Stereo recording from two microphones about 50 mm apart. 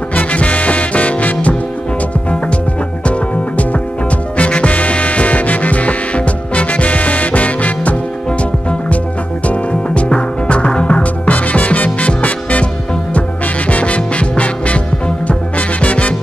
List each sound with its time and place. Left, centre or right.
0.1 s music: left
4.4 s music: left
13.7 s music: left